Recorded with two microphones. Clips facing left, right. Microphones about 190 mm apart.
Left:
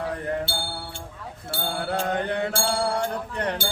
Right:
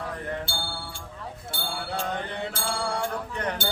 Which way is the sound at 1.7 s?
55° left (ahead or behind).